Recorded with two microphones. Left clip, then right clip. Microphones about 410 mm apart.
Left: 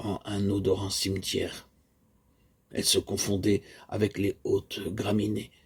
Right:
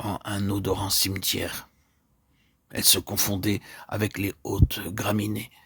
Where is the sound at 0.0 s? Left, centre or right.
Right.